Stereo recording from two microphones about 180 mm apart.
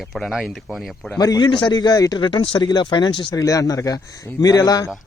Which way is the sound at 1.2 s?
25° left (ahead or behind).